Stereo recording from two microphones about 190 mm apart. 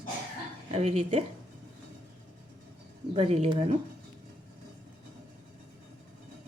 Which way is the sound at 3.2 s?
35° right (ahead or behind).